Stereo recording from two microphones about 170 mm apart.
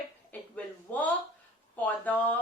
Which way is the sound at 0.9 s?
10° left (ahead or behind).